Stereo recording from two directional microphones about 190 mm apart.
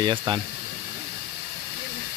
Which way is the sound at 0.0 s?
25° right (ahead or behind).